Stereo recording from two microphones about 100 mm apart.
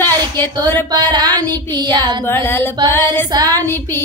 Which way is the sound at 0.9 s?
40° right (ahead or behind).